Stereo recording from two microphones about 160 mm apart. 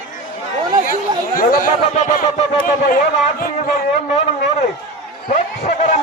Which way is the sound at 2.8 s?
60° left (ahead or behind).